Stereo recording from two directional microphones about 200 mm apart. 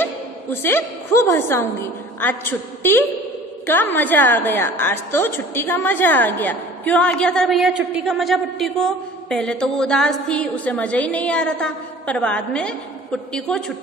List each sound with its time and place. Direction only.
0.0 s a woman's voice: 10° left (ahead or behind)